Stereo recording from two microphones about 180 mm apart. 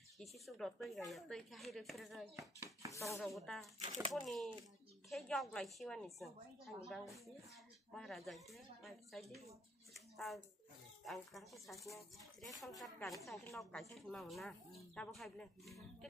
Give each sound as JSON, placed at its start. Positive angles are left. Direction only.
{"t": 0.2, "sound": "a woman's voice", "side_deg": 0}
{"t": 2.9, "sound": "chopping", "side_deg": 15}
{"t": 3.3, "sound": "a woman's voice", "side_deg": 0}
{"t": 11.8, "sound": "speech", "side_deg": 15}
{"t": 12.4, "sound": "a woman's voice", "side_deg": 0}